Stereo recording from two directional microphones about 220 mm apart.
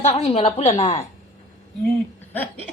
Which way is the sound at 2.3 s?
10° left (ahead or behind).